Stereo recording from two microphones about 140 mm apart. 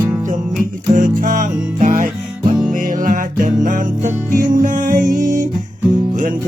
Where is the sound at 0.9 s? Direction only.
70° right (ahead or behind).